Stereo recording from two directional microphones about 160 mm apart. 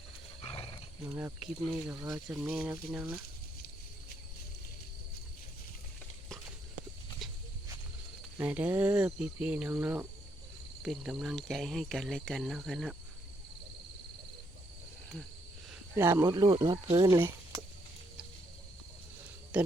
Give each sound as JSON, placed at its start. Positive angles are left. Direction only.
{"t": 1.0, "sound": "speech", "side_deg": -15}
{"t": 2.1, "sound": "speech", "side_deg": -5}
{"t": 7.2, "sound": "a sound", "side_deg": 0}
{"t": 8.4, "sound": "speech", "side_deg": -10}
{"t": 16.0, "sound": "speech", "side_deg": -15}
{"t": 16.2, "sound": "speech", "side_deg": -25}
{"t": 17.2, "sound": "a sound", "side_deg": -15}
{"t": 19.5, "sound": "speech", "side_deg": -5}